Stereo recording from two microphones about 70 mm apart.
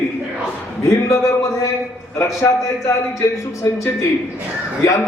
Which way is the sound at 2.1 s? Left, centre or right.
Left.